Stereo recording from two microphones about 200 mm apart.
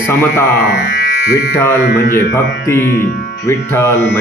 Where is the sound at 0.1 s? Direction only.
10° left (ahead or behind).